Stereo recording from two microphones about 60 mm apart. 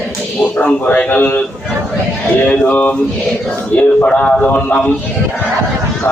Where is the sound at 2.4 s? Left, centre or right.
Left.